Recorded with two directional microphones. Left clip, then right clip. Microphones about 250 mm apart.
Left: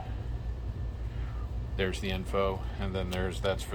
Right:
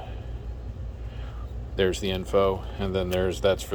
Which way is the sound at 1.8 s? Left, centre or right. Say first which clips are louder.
Right 8 dB; right.